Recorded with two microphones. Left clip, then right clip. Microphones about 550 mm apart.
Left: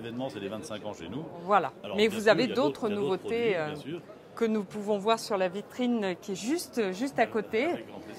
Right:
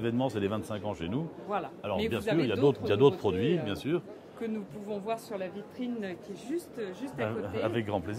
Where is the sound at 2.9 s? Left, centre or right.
Right.